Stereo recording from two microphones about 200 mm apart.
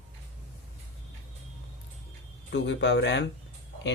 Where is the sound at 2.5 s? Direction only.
60° left (ahead or behind).